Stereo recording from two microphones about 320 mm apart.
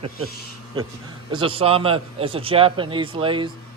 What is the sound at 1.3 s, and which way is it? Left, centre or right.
A man's voice, centre.